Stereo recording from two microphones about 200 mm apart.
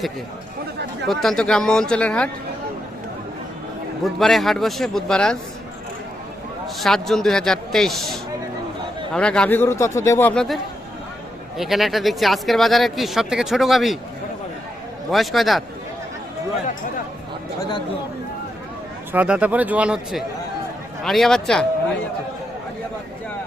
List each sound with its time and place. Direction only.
1.0 s speech: centre (ahead or behind)
4.0 s speech: centre (ahead or behind)
6.7 s a man's voice: centre (ahead or behind)
15.1 s speech: centre (ahead or behind)
17.6 s speech: 20° left (ahead or behind)
19.1 s speech: 5° right (ahead or behind)